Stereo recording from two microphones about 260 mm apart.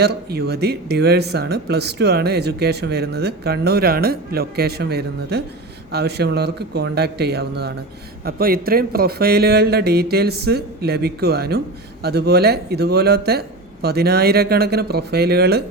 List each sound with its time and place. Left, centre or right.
0.0 s speech: right